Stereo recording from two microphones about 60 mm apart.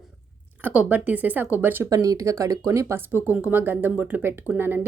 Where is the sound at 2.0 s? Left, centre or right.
Right.